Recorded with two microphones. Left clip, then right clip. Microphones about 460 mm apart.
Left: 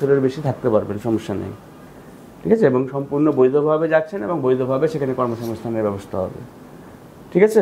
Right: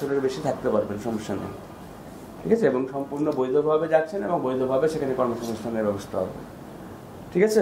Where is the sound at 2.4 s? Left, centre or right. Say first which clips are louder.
Left 6 dB; centre.